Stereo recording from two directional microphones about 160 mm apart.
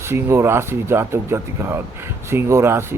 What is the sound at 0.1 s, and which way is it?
Speech, 15° right (ahead or behind).